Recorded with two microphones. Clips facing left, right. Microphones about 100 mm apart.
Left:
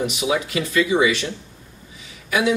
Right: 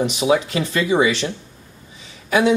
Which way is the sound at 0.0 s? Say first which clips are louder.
Right 4 dB; 30° right (ahead or behind).